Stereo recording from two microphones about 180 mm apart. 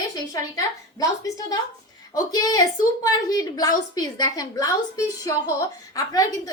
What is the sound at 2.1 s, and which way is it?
A woman's voice, 20° left (ahead or behind).